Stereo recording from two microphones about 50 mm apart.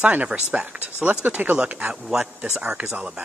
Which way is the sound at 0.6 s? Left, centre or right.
Right.